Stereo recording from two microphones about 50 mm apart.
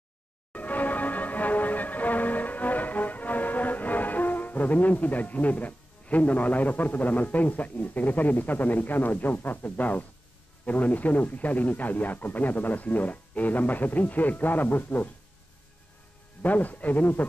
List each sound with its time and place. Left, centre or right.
0.5 s music: left
10.6 s speech: left
16.4 s speech: left